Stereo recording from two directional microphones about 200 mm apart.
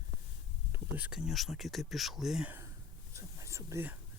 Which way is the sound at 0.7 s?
10° right (ahead or behind).